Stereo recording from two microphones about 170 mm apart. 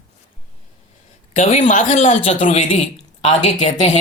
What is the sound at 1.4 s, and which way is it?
A man's voice, 50° left (ahead or behind).